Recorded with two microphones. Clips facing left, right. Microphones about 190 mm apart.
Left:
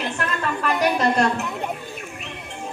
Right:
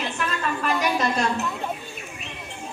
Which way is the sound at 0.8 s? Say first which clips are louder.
Left 7 dB; 65° left (ahead or behind).